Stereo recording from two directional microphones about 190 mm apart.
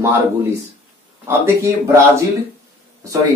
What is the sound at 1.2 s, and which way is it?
Speech, 15° right (ahead or behind).